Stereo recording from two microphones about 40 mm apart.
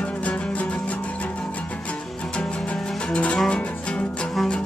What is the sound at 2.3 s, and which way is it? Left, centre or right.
Music, left.